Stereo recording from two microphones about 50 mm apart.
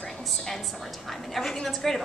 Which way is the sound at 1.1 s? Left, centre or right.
Centre.